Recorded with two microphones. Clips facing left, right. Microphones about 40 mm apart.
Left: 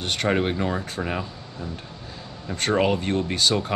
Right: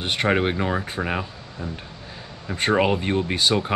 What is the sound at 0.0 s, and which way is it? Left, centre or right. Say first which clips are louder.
Speech: right 2 dB; centre.